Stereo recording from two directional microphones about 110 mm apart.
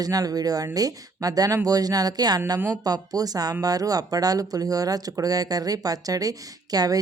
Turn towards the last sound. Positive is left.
turn(degrees=-35)  # may be behind; listen again after turning